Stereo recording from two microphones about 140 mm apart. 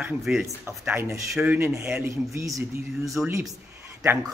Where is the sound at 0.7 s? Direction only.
15° right (ahead or behind).